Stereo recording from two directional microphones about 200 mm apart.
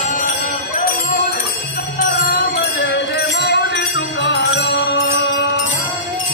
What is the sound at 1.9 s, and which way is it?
Music, 55° left (ahead or behind).